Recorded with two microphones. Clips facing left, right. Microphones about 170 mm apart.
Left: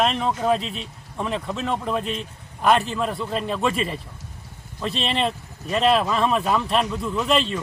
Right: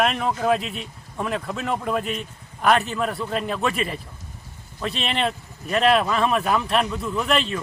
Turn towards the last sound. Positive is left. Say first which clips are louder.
# left 1 dB
turn(degrees=0)  # may be behind; listen again after turning